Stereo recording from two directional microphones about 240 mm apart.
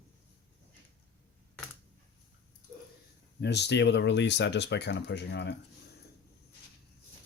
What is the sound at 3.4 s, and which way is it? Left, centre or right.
Speech, left.